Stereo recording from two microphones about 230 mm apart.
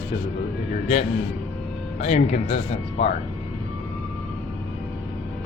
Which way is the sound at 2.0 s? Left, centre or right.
Left.